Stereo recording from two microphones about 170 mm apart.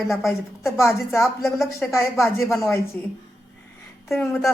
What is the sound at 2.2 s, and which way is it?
Speech, 15° left (ahead or behind).